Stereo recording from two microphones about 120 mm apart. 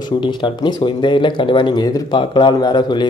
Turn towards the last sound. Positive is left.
turn(degrees=40)  # may be behind; listen again after turning